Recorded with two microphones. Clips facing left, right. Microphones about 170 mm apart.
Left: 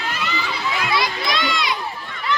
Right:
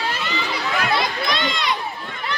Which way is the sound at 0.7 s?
55° right (ahead or behind).